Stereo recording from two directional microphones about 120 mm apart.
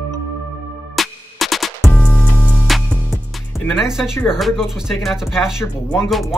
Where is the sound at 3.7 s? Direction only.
5° right (ahead or behind).